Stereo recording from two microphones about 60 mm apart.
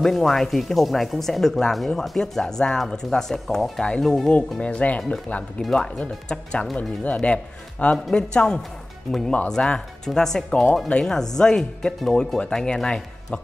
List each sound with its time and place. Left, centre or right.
0.0 s speech: centre
4.3 s speech: centre
5.6 s speech: centre